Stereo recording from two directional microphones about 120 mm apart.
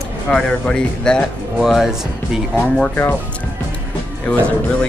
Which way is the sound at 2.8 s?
20° left (ahead or behind).